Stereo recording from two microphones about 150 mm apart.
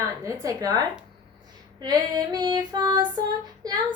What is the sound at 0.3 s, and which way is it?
Female singing, 20° right (ahead or behind).